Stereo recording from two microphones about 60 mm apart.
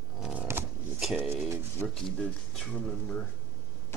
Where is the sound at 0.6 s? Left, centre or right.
Right.